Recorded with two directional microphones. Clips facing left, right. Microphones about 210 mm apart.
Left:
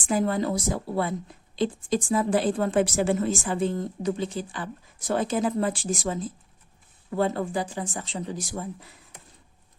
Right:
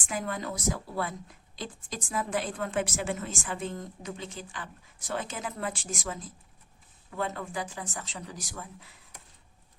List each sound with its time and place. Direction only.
0.1 s speech: 35° left (ahead or behind)